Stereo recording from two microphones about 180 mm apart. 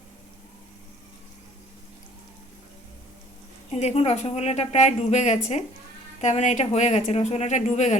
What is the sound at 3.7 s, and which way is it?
A woman's voice, 35° left (ahead or behind).